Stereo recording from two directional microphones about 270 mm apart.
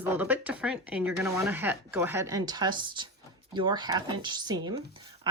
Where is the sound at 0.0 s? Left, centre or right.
Centre.